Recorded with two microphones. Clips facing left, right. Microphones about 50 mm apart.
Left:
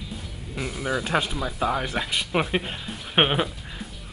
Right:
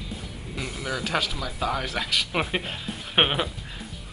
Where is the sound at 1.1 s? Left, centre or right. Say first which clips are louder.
Left 2 dB; left.